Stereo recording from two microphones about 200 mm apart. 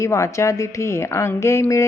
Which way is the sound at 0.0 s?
15° left (ahead or behind).